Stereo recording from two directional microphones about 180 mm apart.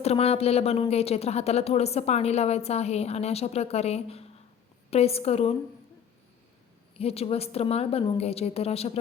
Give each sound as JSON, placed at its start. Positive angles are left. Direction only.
{"t": 0.0, "sound": "a woman's voice", "side_deg": 35}
{"t": 6.9, "sound": "a woman's voice", "side_deg": 35}